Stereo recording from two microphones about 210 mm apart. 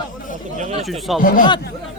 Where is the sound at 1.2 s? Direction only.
40° left (ahead or behind).